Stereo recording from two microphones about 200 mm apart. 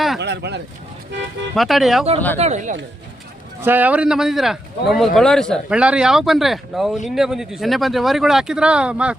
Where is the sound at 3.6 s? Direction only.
10° right (ahead or behind).